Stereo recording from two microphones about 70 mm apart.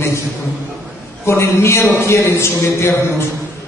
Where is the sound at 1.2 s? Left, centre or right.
Left.